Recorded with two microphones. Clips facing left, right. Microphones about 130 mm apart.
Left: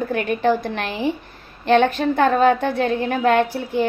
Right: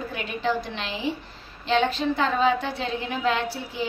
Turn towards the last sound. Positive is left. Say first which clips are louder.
# left 10 dB
turn(degrees=50)  # may be behind; listen again after turning